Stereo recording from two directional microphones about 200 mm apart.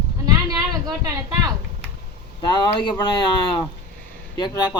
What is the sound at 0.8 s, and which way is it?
Speech, 20° right (ahead or behind).